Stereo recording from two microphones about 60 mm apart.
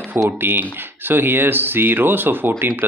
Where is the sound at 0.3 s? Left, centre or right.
Right.